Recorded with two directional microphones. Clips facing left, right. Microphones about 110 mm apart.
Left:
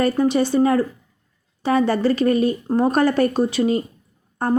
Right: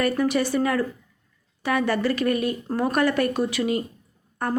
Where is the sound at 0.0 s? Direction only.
30° left (ahead or behind).